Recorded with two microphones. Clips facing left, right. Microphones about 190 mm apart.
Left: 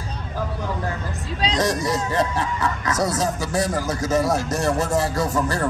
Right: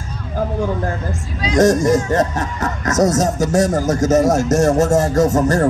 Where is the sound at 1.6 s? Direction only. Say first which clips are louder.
Right 11 dB; 45° right (ahead or behind).